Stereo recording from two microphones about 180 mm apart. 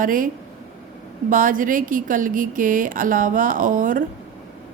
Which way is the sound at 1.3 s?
50° right (ahead or behind).